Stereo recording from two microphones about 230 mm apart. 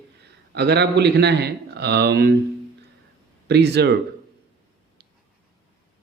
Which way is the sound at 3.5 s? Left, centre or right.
Right.